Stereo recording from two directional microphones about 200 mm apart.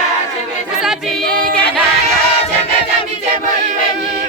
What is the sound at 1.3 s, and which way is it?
Singing, 45° right (ahead or behind).